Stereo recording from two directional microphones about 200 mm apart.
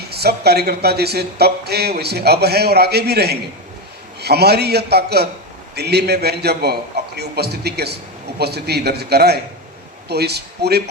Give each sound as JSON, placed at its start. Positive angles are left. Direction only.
{"t": 0.1, "sound": "a man's voice", "side_deg": -50}